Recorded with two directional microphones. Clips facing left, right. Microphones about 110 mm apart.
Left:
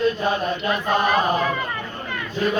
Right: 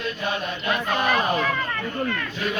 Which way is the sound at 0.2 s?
40° left (ahead or behind).